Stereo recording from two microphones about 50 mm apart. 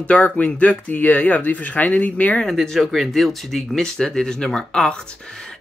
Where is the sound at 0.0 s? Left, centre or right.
Left.